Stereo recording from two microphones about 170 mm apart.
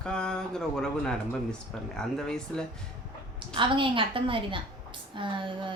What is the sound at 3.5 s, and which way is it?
A woman's voice, 30° right (ahead or behind).